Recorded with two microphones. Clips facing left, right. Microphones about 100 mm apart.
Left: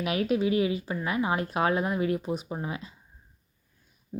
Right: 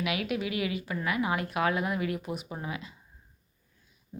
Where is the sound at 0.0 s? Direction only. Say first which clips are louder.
Left 5 dB; 35° left (ahead or behind).